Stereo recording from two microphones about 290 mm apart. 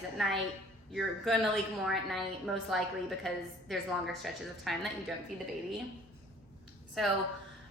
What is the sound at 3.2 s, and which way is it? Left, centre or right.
A woman's voice, centre.